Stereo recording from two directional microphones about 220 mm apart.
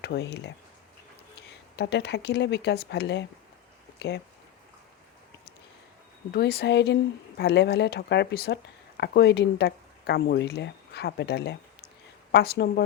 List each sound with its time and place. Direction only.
0.0 s speech: 50° left (ahead or behind)
6.3 s speech: 45° left (ahead or behind)